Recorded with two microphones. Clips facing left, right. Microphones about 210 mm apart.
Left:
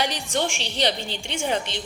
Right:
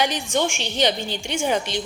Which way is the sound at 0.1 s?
Centre (ahead or behind).